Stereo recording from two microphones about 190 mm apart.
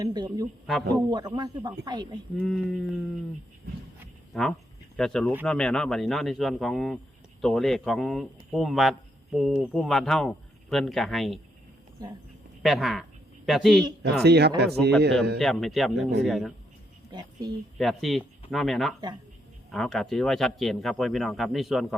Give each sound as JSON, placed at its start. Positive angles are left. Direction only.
{"t": 0.0, "sound": "speech", "side_deg": -20}
{"t": 0.7, "sound": "speech", "side_deg": 0}
{"t": 1.1, "sound": "speech", "side_deg": -25}
{"t": 2.4, "sound": "speech", "side_deg": 5}
{"t": 4.3, "sound": "speech", "side_deg": 0}
{"t": 12.0, "sound": "speech", "side_deg": -20}
{"t": 12.6, "sound": "speech", "side_deg": 0}
{"t": 14.0, "sound": "speech", "side_deg": -60}
{"t": 15.4, "sound": "speech", "side_deg": 0}
{"t": 17.1, "sound": "a sound", "side_deg": -20}
{"t": 17.7, "sound": "speech", "side_deg": 0}